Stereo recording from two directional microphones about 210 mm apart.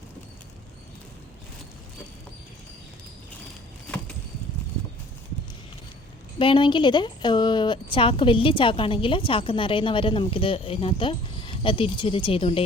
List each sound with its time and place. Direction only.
6.4 s speech: 25° left (ahead or behind)